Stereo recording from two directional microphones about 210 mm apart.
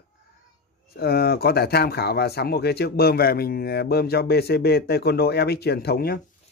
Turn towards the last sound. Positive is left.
turn(degrees=45)  # may be behind; listen again after turning